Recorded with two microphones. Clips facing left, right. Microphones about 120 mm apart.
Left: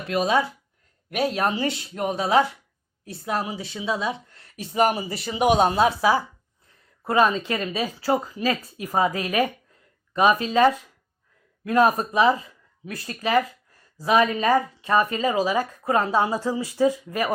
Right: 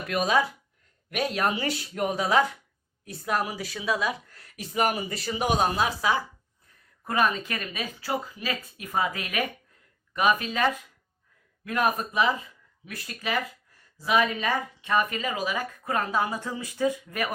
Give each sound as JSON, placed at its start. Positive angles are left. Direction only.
{"t": 0.1, "sound": "speech", "side_deg": 30}